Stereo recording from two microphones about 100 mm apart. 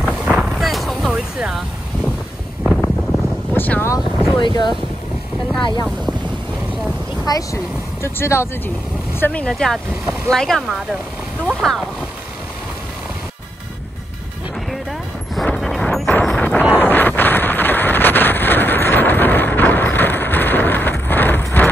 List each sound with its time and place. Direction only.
0.3 s a sound: 5° right (ahead or behind)
2.6 s wind noise: centre (ahead or behind)
3.5 s wind noise: 20° left (ahead or behind)
4.2 s speech: 50° left (ahead or behind)
7.2 s speech: 35° left (ahead or behind)
9.2 s speech: 15° left (ahead or behind)
14.7 s music: centre (ahead or behind)
15.4 s vehicle: 5° left (ahead or behind)
16.3 s wind noise: 15° left (ahead or behind)
16.7 s a sound: 20° left (ahead or behind)